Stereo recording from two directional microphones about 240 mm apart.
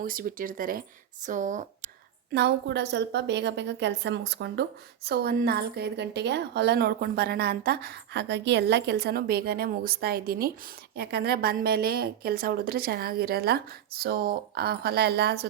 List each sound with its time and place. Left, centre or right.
0.0 s a woman's voice: right
2.3 s a woman's voice: right